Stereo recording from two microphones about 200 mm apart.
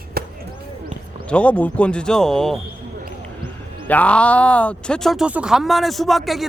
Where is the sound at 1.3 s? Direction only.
5° left (ahead or behind).